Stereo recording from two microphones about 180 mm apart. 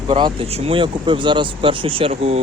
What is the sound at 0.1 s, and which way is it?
Speech, 30° right (ahead or behind).